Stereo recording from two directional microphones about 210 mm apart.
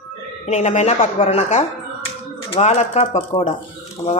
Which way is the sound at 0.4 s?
35° left (ahead or behind).